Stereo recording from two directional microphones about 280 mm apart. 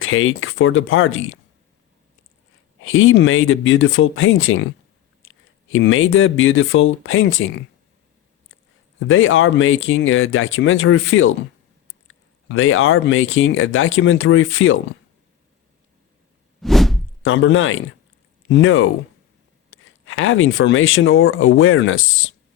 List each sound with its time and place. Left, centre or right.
0.0 s speech: left
2.8 s speech: left
5.2 s a sound: left
5.7 s speech: left
9.0 s speech: left
12.5 s speech: left
16.6 s whoosh: centre
17.2 s speech: left